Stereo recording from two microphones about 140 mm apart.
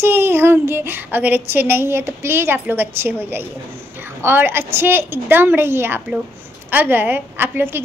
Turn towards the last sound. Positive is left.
turn(degrees=-15)  # may be behind; listen again after turning